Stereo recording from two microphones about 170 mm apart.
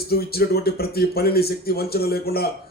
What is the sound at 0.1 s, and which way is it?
A man's voice, 65° left (ahead or behind).